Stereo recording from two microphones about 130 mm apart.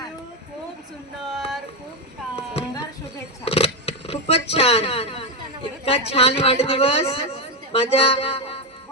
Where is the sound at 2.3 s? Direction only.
50° left (ahead or behind).